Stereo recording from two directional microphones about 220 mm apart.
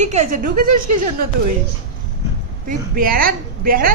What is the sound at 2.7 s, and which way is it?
A woman's voice, 40° right (ahead or behind).